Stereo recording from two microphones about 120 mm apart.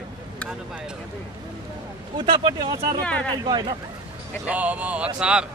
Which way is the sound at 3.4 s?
35° right (ahead or behind).